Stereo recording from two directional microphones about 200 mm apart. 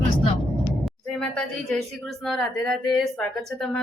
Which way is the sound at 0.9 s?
5° left (ahead or behind).